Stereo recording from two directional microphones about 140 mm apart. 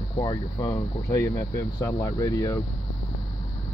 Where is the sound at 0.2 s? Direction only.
30° left (ahead or behind).